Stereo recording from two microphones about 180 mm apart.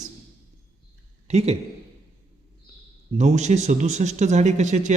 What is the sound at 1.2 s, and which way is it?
Speech, 35° right (ahead or behind).